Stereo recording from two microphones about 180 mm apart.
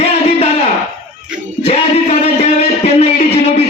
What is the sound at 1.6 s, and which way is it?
Music, 35° left (ahead or behind).